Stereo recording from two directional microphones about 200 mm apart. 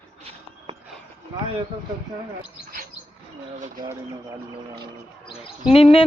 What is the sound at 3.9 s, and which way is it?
Speech, 20° right (ahead or behind).